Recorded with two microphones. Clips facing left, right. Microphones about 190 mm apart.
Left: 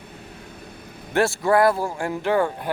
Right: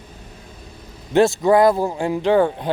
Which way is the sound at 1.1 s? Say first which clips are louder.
Right 5 dB; 20° right (ahead or behind).